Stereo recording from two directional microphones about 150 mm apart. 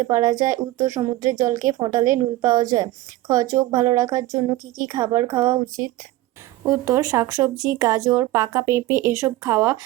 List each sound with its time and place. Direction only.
0.0 s speech: 25° right (ahead or behind)
6.7 s speech: 20° right (ahead or behind)